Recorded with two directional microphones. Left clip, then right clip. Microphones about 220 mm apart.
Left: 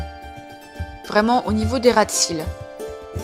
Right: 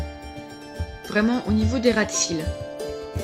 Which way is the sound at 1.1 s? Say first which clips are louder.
Left 6 dB; 20° left (ahead or behind).